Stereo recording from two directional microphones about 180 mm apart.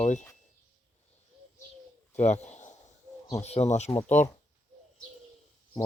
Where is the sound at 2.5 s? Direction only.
40° left (ahead or behind).